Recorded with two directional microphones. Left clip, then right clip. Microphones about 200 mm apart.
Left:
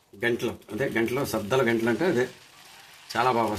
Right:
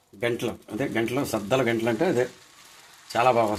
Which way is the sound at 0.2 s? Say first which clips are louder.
Even; 35° right (ahead or behind).